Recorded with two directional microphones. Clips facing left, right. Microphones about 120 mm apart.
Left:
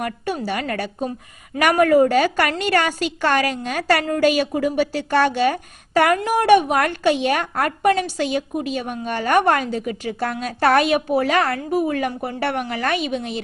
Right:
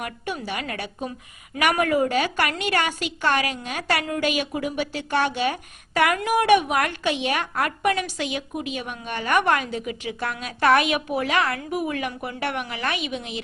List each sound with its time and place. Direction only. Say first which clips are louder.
0.0 s a woman's voice: left 6 dB; 40° left (ahead or behind)